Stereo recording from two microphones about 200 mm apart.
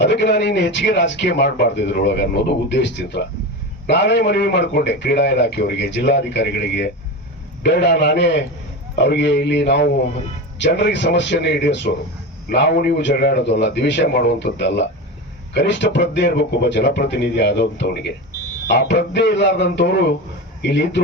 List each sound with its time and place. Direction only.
0.0 s speech: 60° left (ahead or behind)